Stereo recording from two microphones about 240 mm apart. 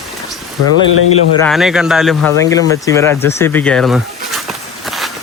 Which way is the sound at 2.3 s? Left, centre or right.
Centre.